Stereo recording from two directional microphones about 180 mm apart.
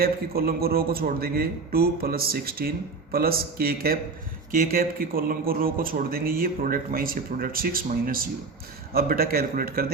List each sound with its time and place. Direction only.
0.0 s a man's voice: 55° right (ahead or behind)